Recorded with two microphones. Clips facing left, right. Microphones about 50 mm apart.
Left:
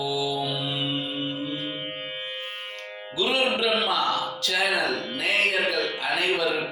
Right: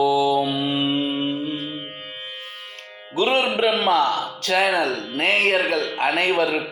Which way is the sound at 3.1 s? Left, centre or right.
Right.